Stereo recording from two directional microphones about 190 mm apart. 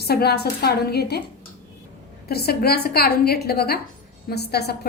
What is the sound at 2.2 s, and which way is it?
A woman's voice, 55° left (ahead or behind).